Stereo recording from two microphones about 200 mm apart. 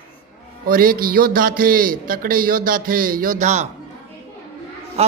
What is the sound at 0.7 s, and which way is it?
A man's voice, 45° right (ahead or behind).